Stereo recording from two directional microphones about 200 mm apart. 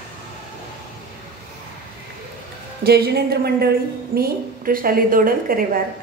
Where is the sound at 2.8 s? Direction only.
55° right (ahead or behind).